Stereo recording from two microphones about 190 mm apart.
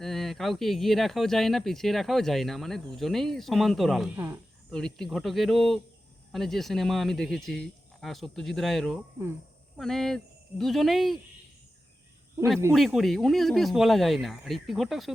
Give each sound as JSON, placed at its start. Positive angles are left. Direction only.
{"t": 0.0, "sound": "speech", "side_deg": 0}
{"t": 12.7, "sound": "speech", "side_deg": 0}